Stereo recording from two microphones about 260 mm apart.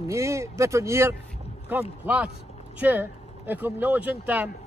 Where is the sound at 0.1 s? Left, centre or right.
Centre.